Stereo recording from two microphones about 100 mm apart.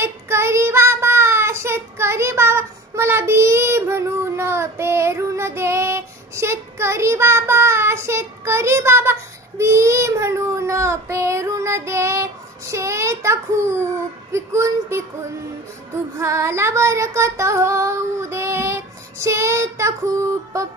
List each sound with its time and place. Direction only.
0.0 s child singing: 25° right (ahead or behind)
16.2 s child singing: 30° right (ahead or behind)